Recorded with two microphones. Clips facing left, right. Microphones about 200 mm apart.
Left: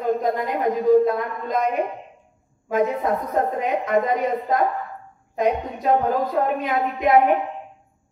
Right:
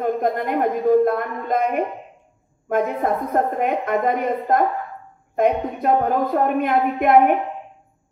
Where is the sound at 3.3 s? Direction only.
55° right (ahead or behind).